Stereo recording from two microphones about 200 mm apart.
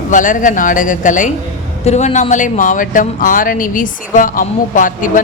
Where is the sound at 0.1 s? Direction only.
40° left (ahead or behind).